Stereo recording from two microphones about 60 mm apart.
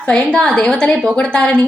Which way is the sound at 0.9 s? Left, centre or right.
Centre.